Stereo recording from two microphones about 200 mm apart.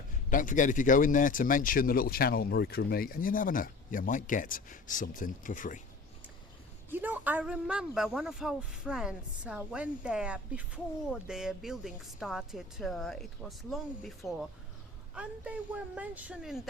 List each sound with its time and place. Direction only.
0.3 s speech: 40° left (ahead or behind)
6.9 s speech: 10° right (ahead or behind)